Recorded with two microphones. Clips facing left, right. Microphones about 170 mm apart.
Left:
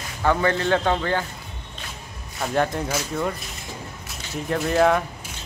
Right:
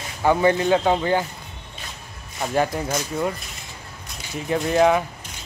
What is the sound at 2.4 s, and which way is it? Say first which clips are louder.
Speech: right 1 dB; 5° right (ahead or behind).